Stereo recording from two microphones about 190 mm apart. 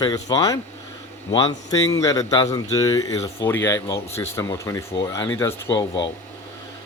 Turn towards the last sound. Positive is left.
turn(degrees=25)  # may be behind; listen again after turning